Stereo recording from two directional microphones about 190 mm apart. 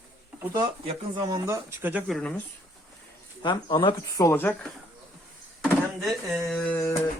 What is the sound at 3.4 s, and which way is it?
Speech, 25° left (ahead or behind).